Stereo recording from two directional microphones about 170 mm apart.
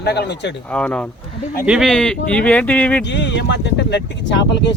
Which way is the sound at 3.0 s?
90° left.